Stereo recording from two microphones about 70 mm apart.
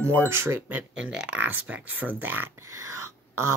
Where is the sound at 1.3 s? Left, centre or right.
Right.